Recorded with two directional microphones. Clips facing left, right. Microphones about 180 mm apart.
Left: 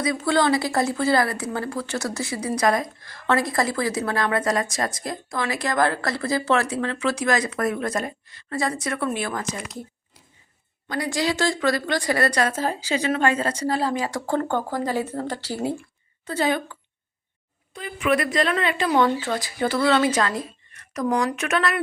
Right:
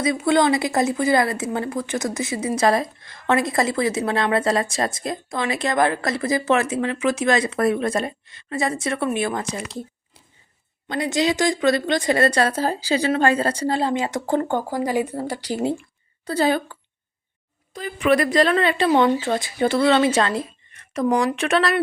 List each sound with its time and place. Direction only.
0.2 s a woman's voice: 20° right (ahead or behind)
10.8 s a woman's voice: 25° right (ahead or behind)
16.2 s a woman's voice: 35° right (ahead or behind)
17.7 s a woman's voice: 35° right (ahead or behind)